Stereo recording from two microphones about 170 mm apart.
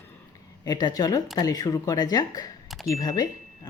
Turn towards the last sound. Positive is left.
turn(degrees=20)  # may be behind; listen again after turning